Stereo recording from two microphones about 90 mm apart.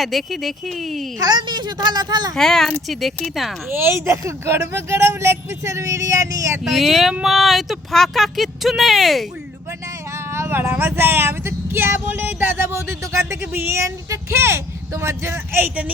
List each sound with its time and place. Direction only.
0.0 s speech: centre (ahead or behind)
1.2 s speech: 55° right (ahead or behind)
2.3 s speech: 5° left (ahead or behind)
3.7 s speech: 25° right (ahead or behind)
6.7 s speech: centre (ahead or behind)
10.3 s speech: 25° right (ahead or behind)